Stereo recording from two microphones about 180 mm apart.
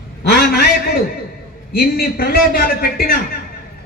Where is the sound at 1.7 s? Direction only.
60° left (ahead or behind).